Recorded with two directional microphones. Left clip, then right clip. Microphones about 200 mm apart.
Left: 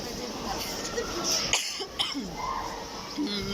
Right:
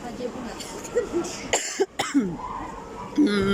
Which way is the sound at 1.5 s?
50° right (ahead or behind).